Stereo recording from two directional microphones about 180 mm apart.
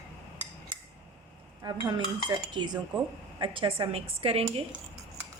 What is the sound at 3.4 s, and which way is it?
A woman's voice, 30° right (ahead or behind).